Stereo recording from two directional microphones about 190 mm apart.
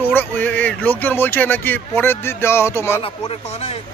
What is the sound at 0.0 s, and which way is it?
Speech, 10° left (ahead or behind).